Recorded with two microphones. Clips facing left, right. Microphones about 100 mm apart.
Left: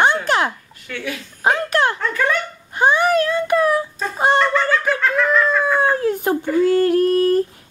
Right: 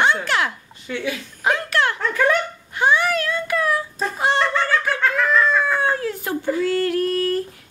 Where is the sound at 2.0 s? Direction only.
10° right (ahead or behind).